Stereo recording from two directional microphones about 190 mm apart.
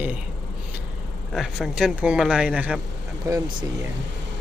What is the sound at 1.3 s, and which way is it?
A man's voice, centre (ahead or behind).